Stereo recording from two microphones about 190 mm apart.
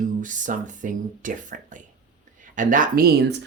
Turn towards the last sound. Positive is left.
turn(degrees=-60)  # may be behind; listen again after turning